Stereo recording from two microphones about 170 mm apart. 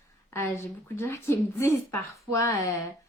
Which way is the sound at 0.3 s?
15° left (ahead or behind).